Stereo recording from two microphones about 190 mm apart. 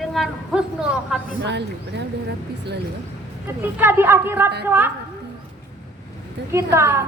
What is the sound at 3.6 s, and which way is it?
A woman's voice, 10° right (ahead or behind).